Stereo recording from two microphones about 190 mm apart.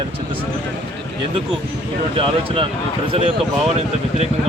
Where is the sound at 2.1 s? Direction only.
30° right (ahead or behind).